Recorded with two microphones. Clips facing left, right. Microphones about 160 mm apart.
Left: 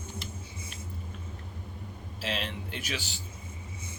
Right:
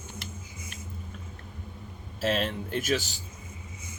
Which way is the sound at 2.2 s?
45° right (ahead or behind).